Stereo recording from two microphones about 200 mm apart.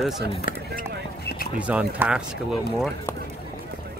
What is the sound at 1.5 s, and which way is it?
Speech, 5° right (ahead or behind).